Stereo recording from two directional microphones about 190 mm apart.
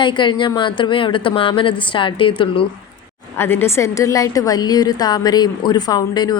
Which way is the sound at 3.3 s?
10° left (ahead or behind).